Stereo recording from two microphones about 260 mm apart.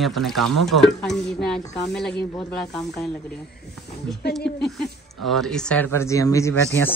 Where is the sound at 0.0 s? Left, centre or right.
Centre.